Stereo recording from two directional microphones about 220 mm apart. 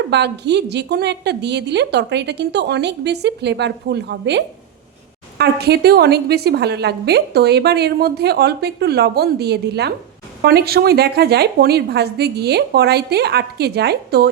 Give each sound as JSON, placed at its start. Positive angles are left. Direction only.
{"t": 0.1, "sound": "a woman's voice", "side_deg": -50}